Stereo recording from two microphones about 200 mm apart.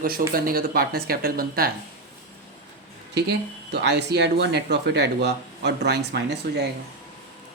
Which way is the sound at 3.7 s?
60° right (ahead or behind).